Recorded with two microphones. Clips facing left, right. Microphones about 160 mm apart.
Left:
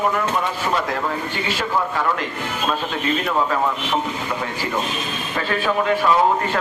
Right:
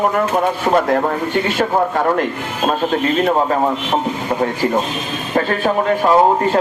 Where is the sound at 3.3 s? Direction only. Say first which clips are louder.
Right 5 dB; 40° right (ahead or behind).